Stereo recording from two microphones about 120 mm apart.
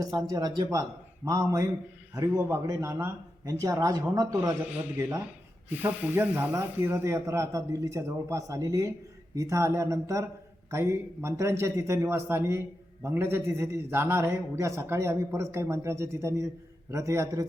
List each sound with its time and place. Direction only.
0.0 s a man's voice: 30° right (ahead or behind)
5.7 s a man's voice: 15° right (ahead or behind)